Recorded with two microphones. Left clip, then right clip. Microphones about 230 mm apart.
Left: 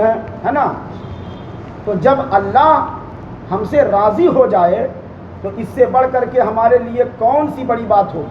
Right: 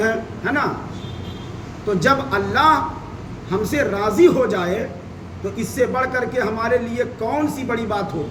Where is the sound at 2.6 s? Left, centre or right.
Centre.